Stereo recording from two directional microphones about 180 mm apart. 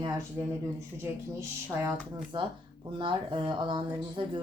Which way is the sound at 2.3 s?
25° right (ahead or behind).